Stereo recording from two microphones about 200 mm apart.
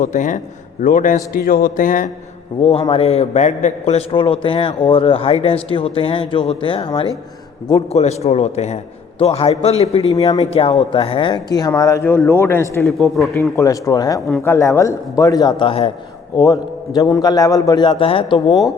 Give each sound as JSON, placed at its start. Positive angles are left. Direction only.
{"t": 0.0, "sound": "a man's voice", "side_deg": 40}
{"t": 2.8, "sound": "a man's voice", "side_deg": 30}
{"t": 12.8, "sound": "speech", "side_deg": 0}
{"t": 13.3, "sound": "speech", "side_deg": 15}
{"t": 14.3, "sound": "speech", "side_deg": 0}
{"t": 14.5, "sound": "a man's voice", "side_deg": 15}